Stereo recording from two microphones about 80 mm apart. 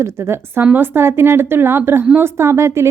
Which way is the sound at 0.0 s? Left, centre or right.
Right.